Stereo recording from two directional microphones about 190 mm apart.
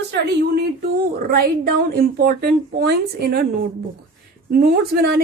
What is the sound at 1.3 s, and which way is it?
A woman's voice, 55° right (ahead or behind).